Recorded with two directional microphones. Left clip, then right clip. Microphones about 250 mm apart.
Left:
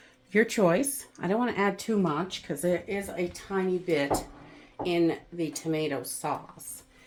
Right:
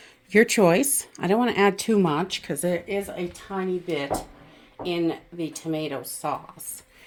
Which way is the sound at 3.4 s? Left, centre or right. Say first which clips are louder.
Right 1 dB; centre.